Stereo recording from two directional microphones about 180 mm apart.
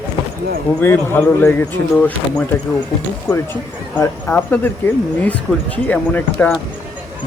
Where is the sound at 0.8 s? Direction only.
10° left (ahead or behind).